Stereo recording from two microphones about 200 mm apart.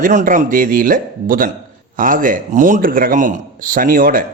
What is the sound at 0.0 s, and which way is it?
Speech, 40° right (ahead or behind).